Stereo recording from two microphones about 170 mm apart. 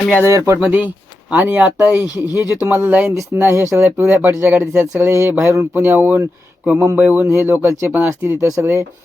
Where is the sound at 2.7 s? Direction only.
10° right (ahead or behind).